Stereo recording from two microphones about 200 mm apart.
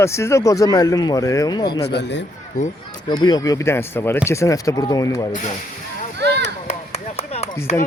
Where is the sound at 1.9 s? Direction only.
60° left (ahead or behind).